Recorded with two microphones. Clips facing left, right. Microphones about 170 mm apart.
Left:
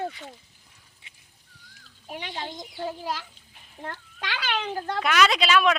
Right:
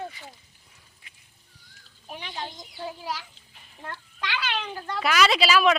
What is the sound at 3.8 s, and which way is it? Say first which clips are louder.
A child's voice: even; 50° left (ahead or behind).